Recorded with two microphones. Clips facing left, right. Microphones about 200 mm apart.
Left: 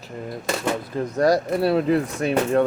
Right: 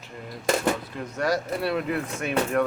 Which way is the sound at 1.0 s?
40° left (ahead or behind).